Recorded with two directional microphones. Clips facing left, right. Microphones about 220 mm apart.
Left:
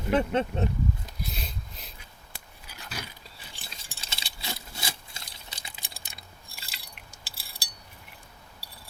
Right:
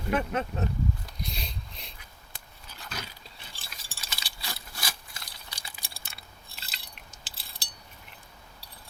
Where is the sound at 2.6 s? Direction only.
10° left (ahead or behind).